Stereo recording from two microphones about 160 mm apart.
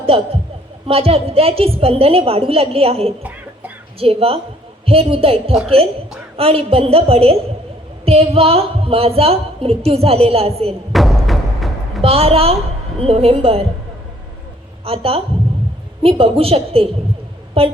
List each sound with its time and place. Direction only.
0.1 s a woman's voice: 35° right (ahead or behind)
10.9 s music: centre (ahead or behind)
12.0 s a woman's voice: 40° right (ahead or behind)
14.8 s a woman's voice: 35° right (ahead or behind)